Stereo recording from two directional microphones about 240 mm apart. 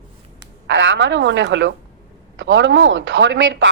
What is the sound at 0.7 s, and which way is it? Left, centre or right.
A woman's voice, right.